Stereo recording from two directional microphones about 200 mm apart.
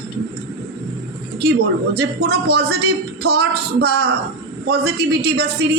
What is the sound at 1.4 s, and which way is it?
A man's voice, 55° right (ahead or behind).